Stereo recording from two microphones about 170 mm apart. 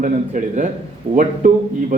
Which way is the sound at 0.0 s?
50° right (ahead or behind).